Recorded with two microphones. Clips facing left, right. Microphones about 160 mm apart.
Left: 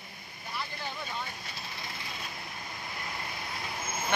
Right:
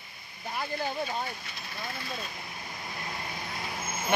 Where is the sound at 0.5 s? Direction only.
40° right (ahead or behind).